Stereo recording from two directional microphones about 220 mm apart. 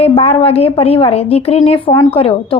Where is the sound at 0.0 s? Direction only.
25° left (ahead or behind).